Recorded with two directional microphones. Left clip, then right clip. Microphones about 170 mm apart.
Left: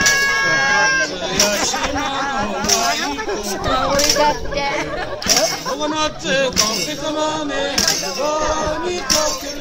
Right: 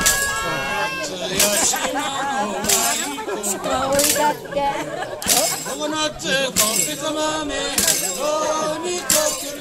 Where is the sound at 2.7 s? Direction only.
15° left (ahead or behind).